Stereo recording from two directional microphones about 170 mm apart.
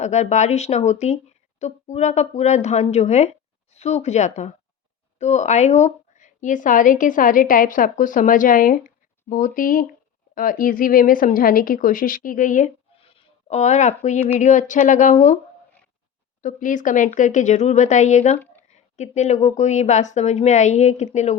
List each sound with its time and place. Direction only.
0.0 s a woman's voice: 40° left (ahead or behind)
13.0 s speech: 35° left (ahead or behind)
16.4 s a woman's voice: 50° left (ahead or behind)